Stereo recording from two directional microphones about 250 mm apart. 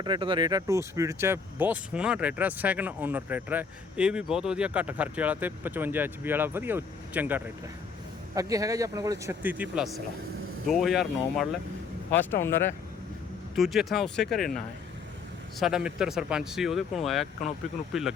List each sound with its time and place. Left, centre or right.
0.0 s speech: centre